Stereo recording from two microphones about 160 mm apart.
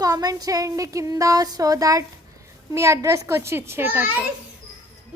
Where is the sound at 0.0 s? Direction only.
25° right (ahead or behind).